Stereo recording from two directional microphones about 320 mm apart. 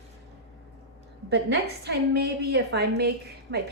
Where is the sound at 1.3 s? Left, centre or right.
Right.